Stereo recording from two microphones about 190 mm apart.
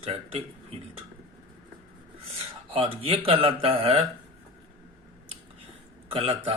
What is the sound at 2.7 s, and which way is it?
Speech, 30° right (ahead or behind).